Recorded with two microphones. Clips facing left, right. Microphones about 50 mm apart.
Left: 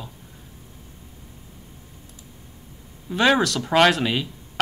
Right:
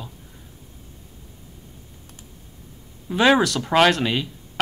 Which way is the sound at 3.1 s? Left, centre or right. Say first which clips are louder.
Right 2 dB; centre.